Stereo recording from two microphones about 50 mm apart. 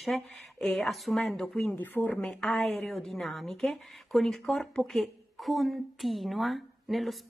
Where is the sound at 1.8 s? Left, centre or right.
Left.